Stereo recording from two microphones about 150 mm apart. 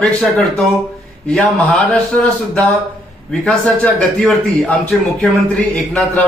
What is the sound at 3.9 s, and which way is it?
Speech, 5° left (ahead or behind).